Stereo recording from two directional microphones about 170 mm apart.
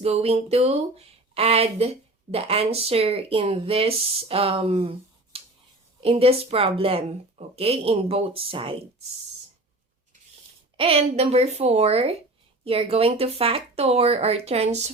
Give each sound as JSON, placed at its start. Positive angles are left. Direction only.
{"t": 0.0, "sound": "speech", "side_deg": -35}
{"t": 10.8, "sound": "speech", "side_deg": -35}